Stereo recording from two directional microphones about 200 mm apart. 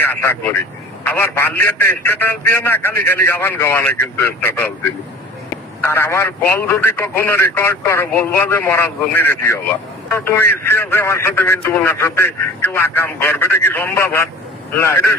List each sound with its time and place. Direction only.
0.0 s a man's voice: 10° left (ahead or behind)
5.8 s a man's voice: 10° left (ahead or behind)